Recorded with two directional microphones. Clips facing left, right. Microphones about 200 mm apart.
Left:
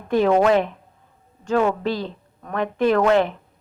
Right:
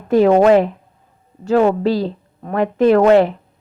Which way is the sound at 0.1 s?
35° right (ahead or behind).